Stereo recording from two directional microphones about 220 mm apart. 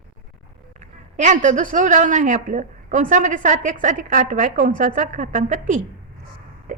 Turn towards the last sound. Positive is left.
turn(degrees=-35)  # may be behind; listen again after turning